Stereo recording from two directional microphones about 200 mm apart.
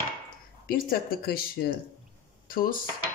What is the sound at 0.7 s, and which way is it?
Speech, 45° left (ahead or behind).